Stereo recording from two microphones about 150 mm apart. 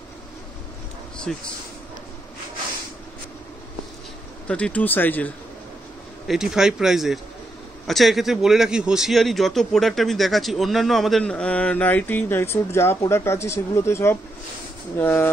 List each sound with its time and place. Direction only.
1.3 s a man's voice: 5° left (ahead or behind)
4.5 s speech: 10° left (ahead or behind)
6.2 s a man's voice: 5° right (ahead or behind); by 15.2 s 15° left (ahead or behind)